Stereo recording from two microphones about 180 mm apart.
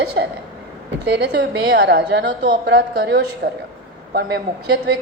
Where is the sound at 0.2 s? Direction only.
80° right.